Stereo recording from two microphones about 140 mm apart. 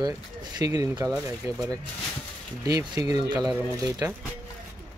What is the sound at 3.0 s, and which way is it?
Speech, 25° right (ahead or behind).